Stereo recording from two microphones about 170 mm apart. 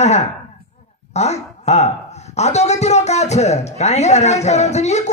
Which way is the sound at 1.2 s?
40° left (ahead or behind).